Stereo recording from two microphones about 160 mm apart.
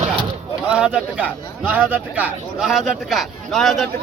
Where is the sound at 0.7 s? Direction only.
5° right (ahead or behind).